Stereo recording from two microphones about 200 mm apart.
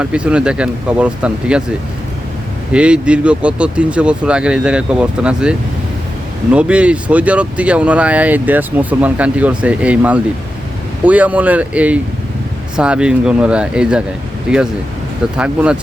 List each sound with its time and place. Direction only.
0.0 s speech: 5° right (ahead or behind)
2.7 s speech: 5° right (ahead or behind)